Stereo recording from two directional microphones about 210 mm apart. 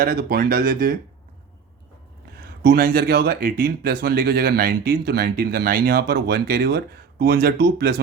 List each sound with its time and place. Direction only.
0.0 s speech: 45° right (ahead or behind)
2.6 s speech: 45° right (ahead or behind)